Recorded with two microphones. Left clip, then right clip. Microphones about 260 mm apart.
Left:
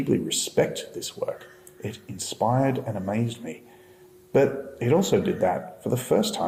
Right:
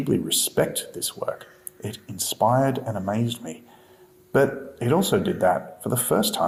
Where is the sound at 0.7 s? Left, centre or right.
Right.